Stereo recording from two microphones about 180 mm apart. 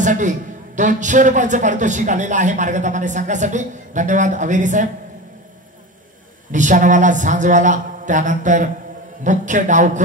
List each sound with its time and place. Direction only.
0.0 s a man's voice: 45° right (ahead or behind)
6.5 s a man's voice: 45° right (ahead or behind)